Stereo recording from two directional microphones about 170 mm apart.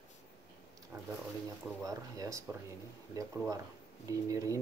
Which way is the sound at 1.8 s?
20° right (ahead or behind).